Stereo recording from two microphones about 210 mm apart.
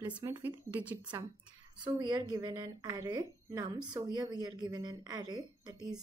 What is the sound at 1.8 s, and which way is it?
Speech, 20° right (ahead or behind).